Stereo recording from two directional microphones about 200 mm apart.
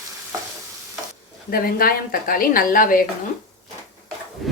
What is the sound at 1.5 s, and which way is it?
A woman's voice, 45° left (ahead or behind).